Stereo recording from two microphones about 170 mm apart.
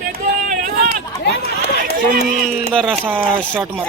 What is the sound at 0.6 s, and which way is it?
Run, 55° right (ahead or behind).